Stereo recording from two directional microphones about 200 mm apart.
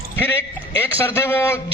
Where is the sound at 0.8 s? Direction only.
10° left (ahead or behind).